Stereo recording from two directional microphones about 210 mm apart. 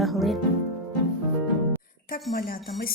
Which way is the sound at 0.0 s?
Centre (ahead or behind).